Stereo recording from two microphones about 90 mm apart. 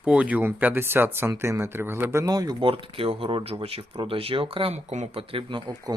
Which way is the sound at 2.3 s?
45° right (ahead or behind).